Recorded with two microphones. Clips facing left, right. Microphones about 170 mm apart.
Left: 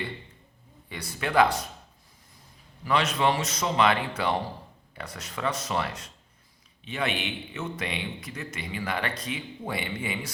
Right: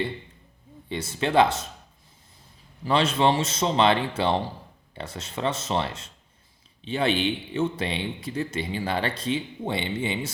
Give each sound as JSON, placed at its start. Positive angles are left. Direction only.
{"t": 0.9, "sound": "a man's voice", "side_deg": -25}
{"t": 2.8, "sound": "a man's voice", "side_deg": -30}